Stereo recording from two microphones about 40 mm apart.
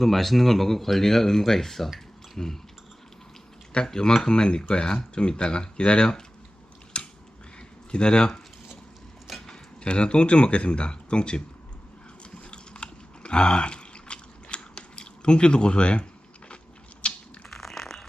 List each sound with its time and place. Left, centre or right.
0.0 s speech: centre
2.4 s speech: centre
3.8 s speech: centre
6.9 s a sound: left
7.9 s speech: left
9.5 s speech: left
12.5 s chewing: left
17.1 s a sound: centre